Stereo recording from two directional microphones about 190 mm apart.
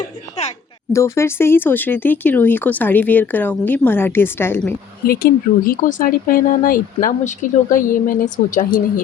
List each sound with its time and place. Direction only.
0.9 s speech: 15° left (ahead or behind)
5.0 s speech: 50° left (ahead or behind)